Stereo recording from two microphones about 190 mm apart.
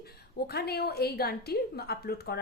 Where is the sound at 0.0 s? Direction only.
55° left (ahead or behind).